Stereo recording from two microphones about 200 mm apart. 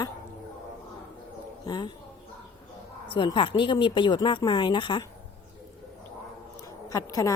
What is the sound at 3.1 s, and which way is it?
Speech, 25° left (ahead or behind).